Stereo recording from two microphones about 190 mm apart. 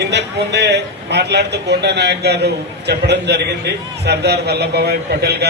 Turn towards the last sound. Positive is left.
turn(degrees=-60)  # may be behind; listen again after turning